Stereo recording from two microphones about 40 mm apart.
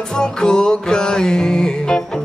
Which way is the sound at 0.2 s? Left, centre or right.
Centre.